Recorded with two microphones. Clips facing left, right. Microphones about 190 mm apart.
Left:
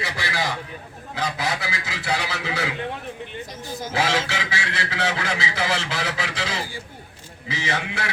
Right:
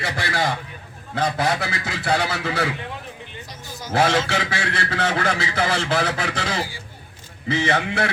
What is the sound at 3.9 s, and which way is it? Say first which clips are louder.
A man's voice: right 5 dB; 55° right (ahead or behind).